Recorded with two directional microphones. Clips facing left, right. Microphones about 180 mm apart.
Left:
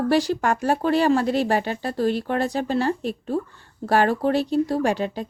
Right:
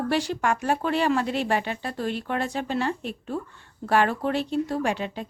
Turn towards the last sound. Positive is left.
turn(degrees=40)  # may be behind; listen again after turning